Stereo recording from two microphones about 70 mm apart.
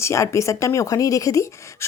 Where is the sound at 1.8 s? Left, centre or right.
Left.